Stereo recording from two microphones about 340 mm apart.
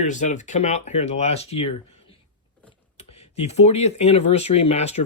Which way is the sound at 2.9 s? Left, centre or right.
Centre.